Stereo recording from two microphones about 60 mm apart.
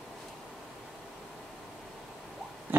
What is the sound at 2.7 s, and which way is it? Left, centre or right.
Pig, right.